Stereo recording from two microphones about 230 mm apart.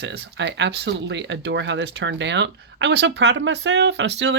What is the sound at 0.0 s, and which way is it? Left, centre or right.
Speech, right.